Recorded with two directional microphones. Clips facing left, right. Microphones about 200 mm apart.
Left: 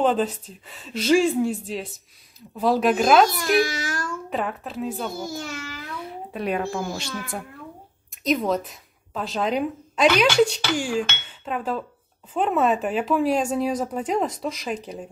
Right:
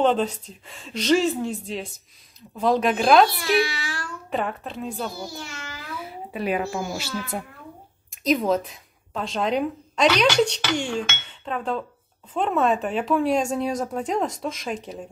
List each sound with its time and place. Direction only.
0.0 s a woman's voice: 5° left (ahead or behind)
3.6 s a sound: 45° left (ahead or behind)
4.3 s a woman's voice: centre (ahead or behind)
5.2 s a child's voice: 45° left (ahead or behind)
5.9 s a child's voice: 5° right (ahead or behind)